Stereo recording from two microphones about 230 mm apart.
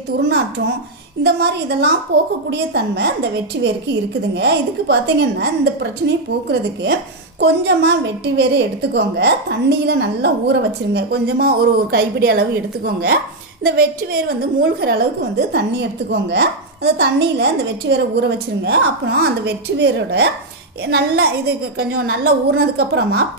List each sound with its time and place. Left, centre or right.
1.2 s a woman's voice: right